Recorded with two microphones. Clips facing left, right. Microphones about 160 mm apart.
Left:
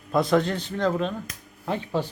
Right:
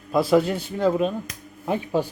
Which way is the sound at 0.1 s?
5° right (ahead or behind).